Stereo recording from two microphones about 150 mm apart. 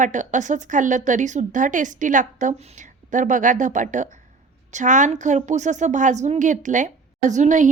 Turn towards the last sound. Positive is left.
turn(degrees=-55)  # may be behind; listen again after turning